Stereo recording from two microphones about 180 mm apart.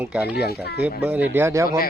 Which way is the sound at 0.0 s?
5° right (ahead or behind).